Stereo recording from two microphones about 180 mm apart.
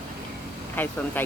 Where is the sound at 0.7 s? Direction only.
10° left (ahead or behind).